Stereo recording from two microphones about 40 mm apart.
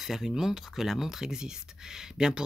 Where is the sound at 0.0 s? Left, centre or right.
Centre.